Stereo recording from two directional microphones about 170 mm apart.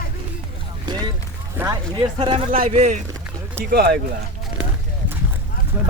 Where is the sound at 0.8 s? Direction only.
25° right (ahead or behind).